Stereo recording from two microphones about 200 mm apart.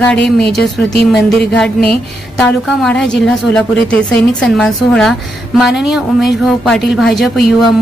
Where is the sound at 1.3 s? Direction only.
Centre (ahead or behind).